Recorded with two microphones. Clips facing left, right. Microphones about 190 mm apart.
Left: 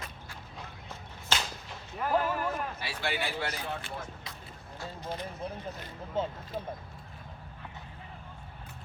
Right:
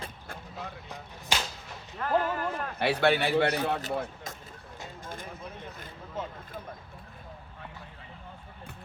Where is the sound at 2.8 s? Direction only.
65° right (ahead or behind).